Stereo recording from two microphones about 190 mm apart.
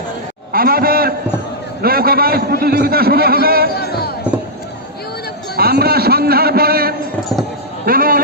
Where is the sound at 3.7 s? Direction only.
55° left (ahead or behind).